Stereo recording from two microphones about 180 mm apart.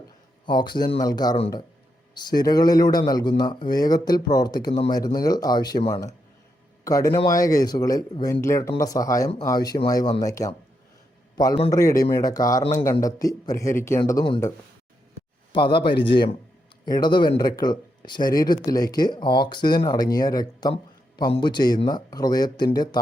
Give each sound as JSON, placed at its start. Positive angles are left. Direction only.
{"t": 0.4, "sound": "speech", "side_deg": 25}
{"t": 15.5, "sound": "speech", "side_deg": 25}